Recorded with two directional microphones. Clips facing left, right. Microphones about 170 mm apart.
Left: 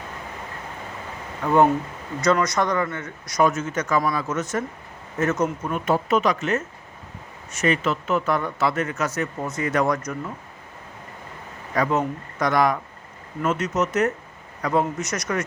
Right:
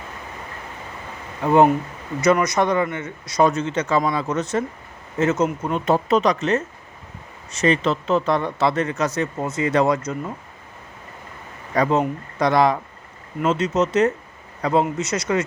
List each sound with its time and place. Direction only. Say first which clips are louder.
1.5 s speech: right 3 dB; 20° right (ahead or behind); by 6.6 s 35° right (ahead or behind)
7.6 s speech: right 3 dB; 35° right (ahead or behind)
9.4 s speech: right 4 dB; 25° right (ahead or behind)
11.7 s speech: right 3 dB; 30° right (ahead or behind)